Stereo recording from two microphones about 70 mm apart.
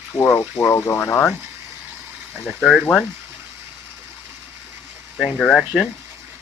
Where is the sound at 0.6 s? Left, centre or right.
Left.